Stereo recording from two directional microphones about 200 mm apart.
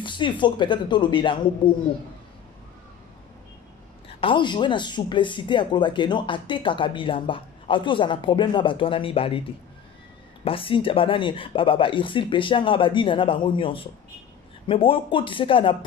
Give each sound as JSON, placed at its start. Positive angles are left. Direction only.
{"t": 0.0, "sound": "speech", "side_deg": 25}
{"t": 4.2, "sound": "speech", "side_deg": 25}
{"t": 10.4, "sound": "speech", "side_deg": 25}